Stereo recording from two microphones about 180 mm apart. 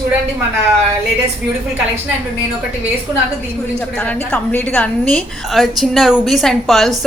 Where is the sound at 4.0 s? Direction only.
10° left (ahead or behind).